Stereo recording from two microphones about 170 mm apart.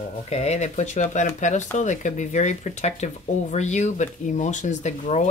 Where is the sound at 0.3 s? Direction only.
40° left (ahead or behind).